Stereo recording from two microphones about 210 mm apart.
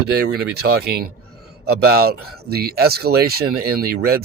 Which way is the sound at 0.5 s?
50° right (ahead or behind).